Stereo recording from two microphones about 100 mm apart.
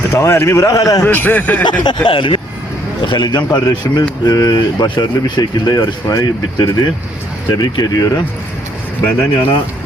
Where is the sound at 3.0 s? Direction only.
45° left (ahead or behind).